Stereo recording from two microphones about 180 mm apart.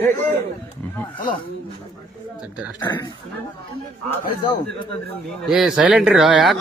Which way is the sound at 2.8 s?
25° left (ahead or behind).